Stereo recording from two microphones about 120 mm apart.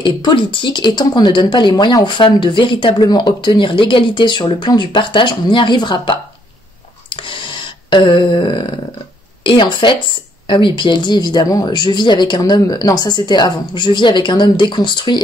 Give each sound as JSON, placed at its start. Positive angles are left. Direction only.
{"t": 0.0, "sound": "speech", "side_deg": 40}
{"t": 7.1, "sound": "a sound", "side_deg": 45}
{"t": 9.4, "sound": "speech", "side_deg": 45}